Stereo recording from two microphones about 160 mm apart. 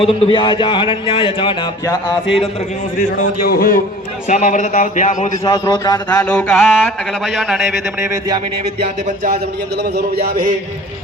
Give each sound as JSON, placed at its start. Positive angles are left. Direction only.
{"t": 0.0, "sound": "speech", "side_deg": 35}
{"t": 3.0, "sound": "speech", "side_deg": 60}
{"t": 4.3, "sound": "speech", "side_deg": 50}
{"t": 5.4, "sound": "a man's voice", "side_deg": 25}
{"t": 6.1, "sound": "a sound", "side_deg": 10}
{"t": 7.1, "sound": "a man's voice", "side_deg": 0}
{"t": 8.8, "sound": "a sound", "side_deg": -50}
{"t": 9.3, "sound": "a man's voice", "side_deg": -85}